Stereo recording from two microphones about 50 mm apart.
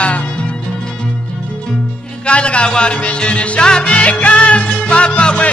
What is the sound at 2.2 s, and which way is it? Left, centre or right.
Music, left.